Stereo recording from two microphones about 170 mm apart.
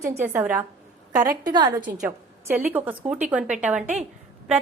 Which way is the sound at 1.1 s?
20° right (ahead or behind).